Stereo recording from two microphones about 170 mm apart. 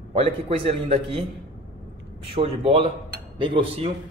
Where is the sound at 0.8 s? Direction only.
35° right (ahead or behind).